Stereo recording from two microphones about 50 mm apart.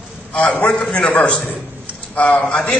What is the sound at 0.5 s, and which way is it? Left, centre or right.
A man's voice, left.